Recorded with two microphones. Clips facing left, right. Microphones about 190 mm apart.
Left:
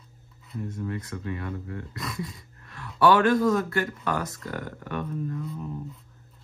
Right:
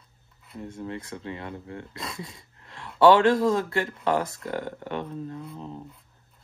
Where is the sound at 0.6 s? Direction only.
25° right (ahead or behind).